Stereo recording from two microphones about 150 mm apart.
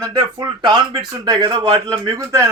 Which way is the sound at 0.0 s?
25° right (ahead or behind).